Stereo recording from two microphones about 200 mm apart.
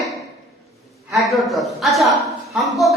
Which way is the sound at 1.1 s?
Centre (ahead or behind).